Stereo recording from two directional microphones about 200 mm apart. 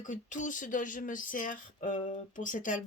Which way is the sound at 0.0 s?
40° left (ahead or behind).